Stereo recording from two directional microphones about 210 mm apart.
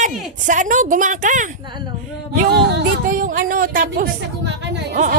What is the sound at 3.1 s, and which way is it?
Speech, 40° right (ahead or behind).